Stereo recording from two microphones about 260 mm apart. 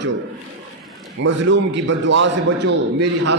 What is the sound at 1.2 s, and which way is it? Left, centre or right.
A man's voice, right.